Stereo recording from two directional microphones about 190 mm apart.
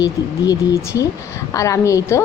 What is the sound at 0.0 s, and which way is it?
Speech, 15° left (ahead or behind).